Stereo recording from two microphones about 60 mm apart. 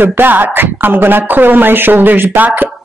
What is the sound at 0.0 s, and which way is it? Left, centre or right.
A man's voice, right.